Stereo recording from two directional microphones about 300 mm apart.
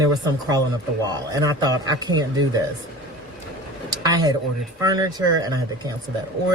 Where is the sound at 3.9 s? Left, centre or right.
Centre.